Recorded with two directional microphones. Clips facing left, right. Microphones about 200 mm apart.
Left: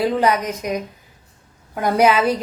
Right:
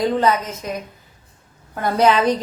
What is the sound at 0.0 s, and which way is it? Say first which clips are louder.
Speech: even; 10° left (ahead or behind).